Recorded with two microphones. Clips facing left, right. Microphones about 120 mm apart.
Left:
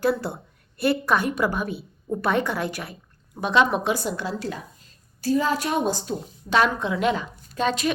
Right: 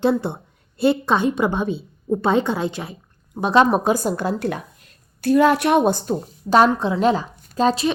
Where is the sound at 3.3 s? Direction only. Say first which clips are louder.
Right 5 dB; 35° right (ahead or behind).